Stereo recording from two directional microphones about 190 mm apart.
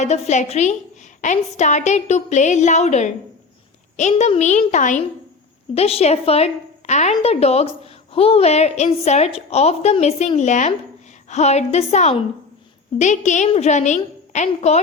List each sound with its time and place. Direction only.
0.0 s a woman's voice: 35° left (ahead or behind)